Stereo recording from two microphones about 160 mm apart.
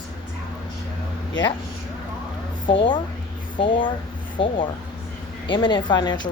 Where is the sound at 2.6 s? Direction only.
30° left (ahead or behind).